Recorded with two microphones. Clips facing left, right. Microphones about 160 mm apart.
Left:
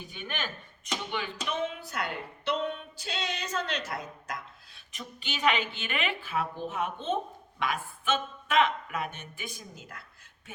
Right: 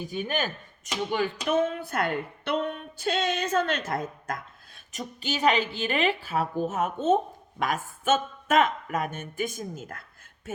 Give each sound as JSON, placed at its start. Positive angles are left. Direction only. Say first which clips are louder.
{"t": 0.1, "sound": "a woman's voice", "louder": "right 8 dB", "side_deg": -40}